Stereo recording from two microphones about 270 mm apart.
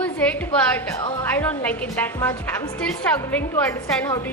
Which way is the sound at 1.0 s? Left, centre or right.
Centre.